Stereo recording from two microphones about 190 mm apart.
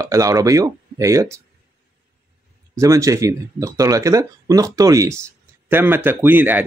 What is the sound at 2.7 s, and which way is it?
Speech, 15° right (ahead or behind).